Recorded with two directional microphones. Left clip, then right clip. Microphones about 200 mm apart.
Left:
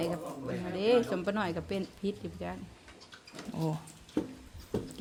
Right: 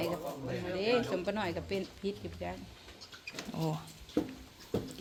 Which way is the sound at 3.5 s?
5° left (ahead or behind).